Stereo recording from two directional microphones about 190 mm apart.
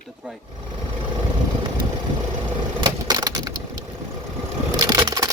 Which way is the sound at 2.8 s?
20° right (ahead or behind).